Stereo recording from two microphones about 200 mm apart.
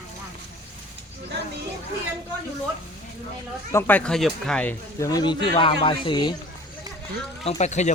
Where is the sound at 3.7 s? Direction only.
10° left (ahead or behind).